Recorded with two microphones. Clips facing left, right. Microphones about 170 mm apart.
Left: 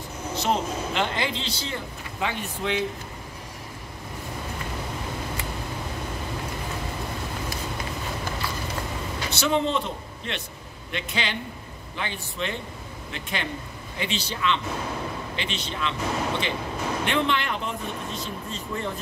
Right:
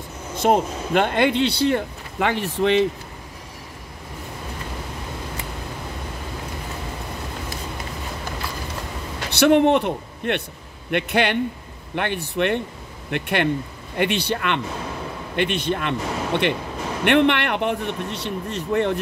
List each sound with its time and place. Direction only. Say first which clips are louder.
0.4 s speech: right 7 dB; 55° right (ahead or behind); by 2.8 s 75° right (ahead or behind)
9.3 s speech: right 9 dB; 65° right (ahead or behind)